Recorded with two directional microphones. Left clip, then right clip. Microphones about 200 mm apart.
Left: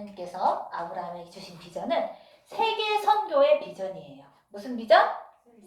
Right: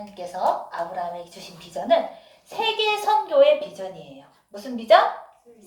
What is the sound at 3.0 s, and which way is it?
Speech, 20° right (ahead or behind).